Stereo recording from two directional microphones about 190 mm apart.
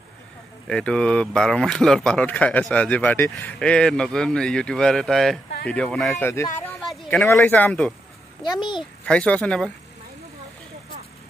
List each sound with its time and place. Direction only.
0.7 s speech: 5° left (ahead or behind)
6.8 s a sound: centre (ahead or behind)
7.3 s speech: 10° left (ahead or behind)
8.5 s a child's voice: 25° left (ahead or behind)
9.0 s speech: 5° left (ahead or behind)